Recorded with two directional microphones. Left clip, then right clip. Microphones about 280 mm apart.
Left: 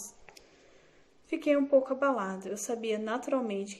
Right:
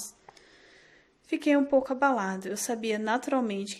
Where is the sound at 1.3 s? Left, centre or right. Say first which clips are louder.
Right 1 dB; right.